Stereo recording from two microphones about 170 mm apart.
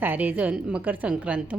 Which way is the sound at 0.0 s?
10° right (ahead or behind).